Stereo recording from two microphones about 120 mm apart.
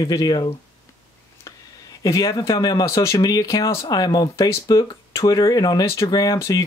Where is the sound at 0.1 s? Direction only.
35° left (ahead or behind).